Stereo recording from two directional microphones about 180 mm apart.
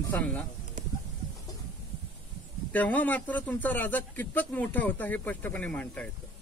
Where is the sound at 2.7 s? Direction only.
10° left (ahead or behind).